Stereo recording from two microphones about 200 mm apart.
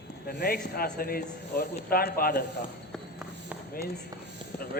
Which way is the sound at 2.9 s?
5° right (ahead or behind).